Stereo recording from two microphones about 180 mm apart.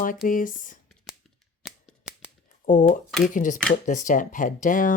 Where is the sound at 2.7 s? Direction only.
45° left (ahead or behind).